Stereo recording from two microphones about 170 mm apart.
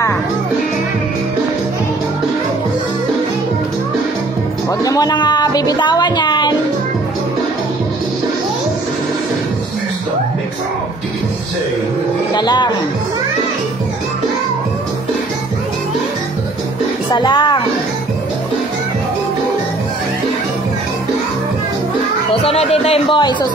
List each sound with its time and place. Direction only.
4.8 s speech: 20° left (ahead or behind)
12.4 s speech: 25° left (ahead or behind)
17.1 s a woman's voice: 25° left (ahead or behind)
22.4 s speech: 35° left (ahead or behind)